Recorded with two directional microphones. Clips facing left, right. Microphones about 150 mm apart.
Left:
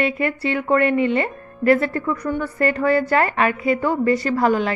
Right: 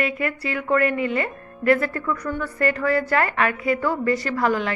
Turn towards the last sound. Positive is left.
turn(degrees=25)  # may be behind; listen again after turning